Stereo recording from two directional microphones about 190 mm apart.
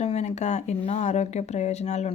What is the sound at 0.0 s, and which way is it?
A woman's voice, 35° left (ahead or behind).